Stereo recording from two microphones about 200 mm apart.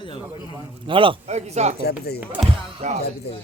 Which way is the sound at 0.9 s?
25° right (ahead or behind).